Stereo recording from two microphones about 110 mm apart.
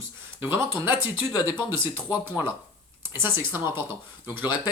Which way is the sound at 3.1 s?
20° right (ahead or behind).